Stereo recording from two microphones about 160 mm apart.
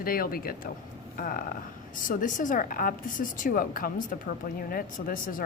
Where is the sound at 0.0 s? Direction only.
65° left (ahead or behind).